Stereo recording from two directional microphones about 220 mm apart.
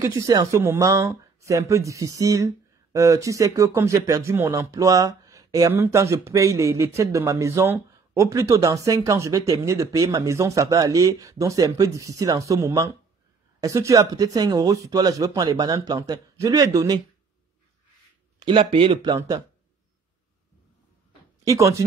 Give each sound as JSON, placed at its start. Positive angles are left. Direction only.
{"t": 0.3, "sound": "speech", "side_deg": -15}
{"t": 18.4, "sound": "speech", "side_deg": -25}
{"t": 21.5, "sound": "speech", "side_deg": -15}